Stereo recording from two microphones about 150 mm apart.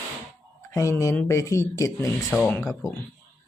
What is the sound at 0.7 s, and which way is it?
Speech, 20° left (ahead or behind).